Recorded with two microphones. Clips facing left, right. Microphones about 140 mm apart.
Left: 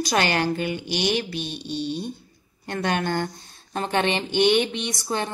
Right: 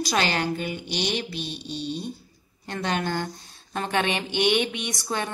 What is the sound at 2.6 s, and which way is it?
Speech, 55° left (ahead or behind).